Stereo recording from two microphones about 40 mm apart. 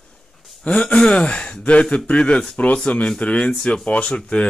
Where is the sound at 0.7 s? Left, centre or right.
Left.